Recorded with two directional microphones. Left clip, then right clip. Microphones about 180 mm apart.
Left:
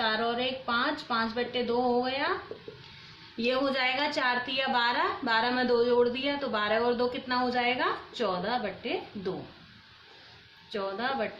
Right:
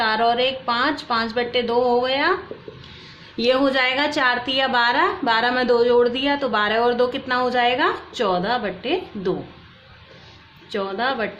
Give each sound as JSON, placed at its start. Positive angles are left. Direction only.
{"t": 0.0, "sound": "a woman's voice", "side_deg": -50}
{"t": 3.3, "sound": "a woman's voice", "side_deg": -50}
{"t": 10.7, "sound": "a woman's voice", "side_deg": -45}